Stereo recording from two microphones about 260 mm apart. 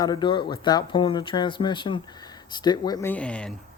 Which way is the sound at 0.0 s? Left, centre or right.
Centre.